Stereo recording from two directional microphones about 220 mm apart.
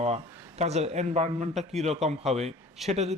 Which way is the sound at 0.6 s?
30° right (ahead or behind).